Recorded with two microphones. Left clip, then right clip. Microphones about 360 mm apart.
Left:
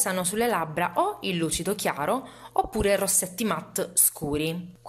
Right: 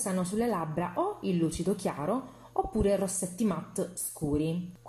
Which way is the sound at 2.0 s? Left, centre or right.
Left.